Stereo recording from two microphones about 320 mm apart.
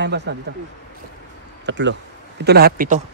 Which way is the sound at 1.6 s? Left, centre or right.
Right.